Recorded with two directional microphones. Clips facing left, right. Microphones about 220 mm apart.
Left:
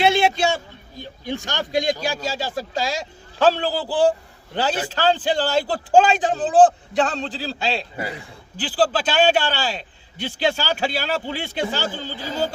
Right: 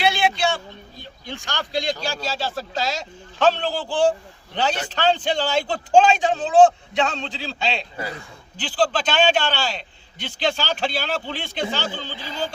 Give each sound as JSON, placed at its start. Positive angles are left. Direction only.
{"t": 0.0, "sound": "a sound", "side_deg": 25}
{"t": 1.5, "sound": "a man's voice", "side_deg": 20}
{"t": 12.0, "sound": "speech", "side_deg": 40}